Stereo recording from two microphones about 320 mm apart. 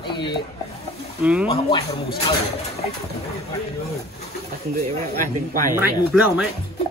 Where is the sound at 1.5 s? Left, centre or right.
Centre.